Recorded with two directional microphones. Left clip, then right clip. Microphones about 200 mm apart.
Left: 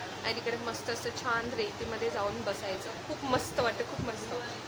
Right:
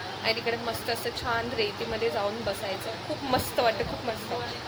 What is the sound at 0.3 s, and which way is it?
A woman's voice, 5° left (ahead or behind).